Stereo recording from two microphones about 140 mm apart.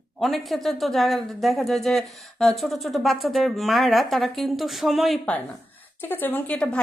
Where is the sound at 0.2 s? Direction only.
Centre (ahead or behind).